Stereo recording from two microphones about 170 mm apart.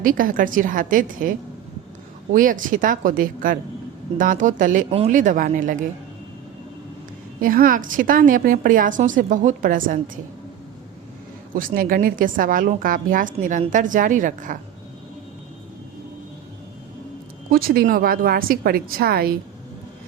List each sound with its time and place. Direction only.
0.0 s a woman's voice: 55° right (ahead or behind)
7.4 s a woman's voice: 55° right (ahead or behind)
11.5 s a woman's voice: 55° right (ahead or behind)
17.5 s a woman's voice: 60° right (ahead or behind)